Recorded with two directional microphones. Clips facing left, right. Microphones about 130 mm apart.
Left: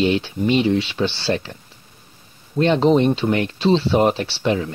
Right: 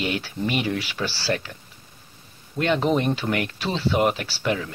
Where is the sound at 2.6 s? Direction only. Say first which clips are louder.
Left 6 dB; 30° left (ahead or behind).